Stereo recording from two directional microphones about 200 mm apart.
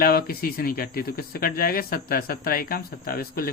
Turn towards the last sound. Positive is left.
turn(degrees=45)  # may be behind; listen again after turning